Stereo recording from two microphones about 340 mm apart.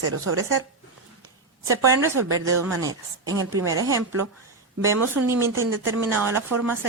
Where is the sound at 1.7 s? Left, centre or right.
Centre.